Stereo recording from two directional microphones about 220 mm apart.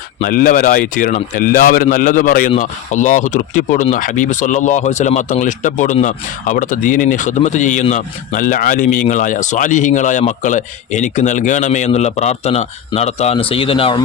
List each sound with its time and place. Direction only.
0.2 s speech: 40° left (ahead or behind); by 14.0 s 25° left (ahead or behind)